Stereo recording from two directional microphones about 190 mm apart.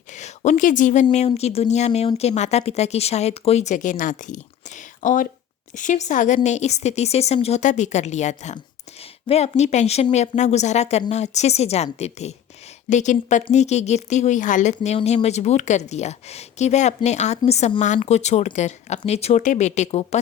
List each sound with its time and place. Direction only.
0.1 s speech: 40° left (ahead or behind)